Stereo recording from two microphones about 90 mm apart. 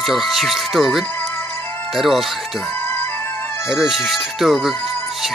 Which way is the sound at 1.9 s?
Centre (ahead or behind).